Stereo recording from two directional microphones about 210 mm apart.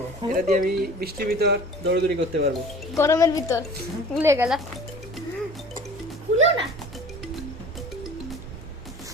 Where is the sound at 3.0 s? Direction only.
15° left (ahead or behind).